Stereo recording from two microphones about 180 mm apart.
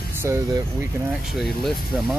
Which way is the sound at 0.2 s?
15° right (ahead or behind).